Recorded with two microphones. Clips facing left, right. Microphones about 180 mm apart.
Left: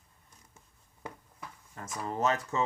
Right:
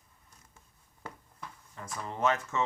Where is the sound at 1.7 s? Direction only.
40° left (ahead or behind).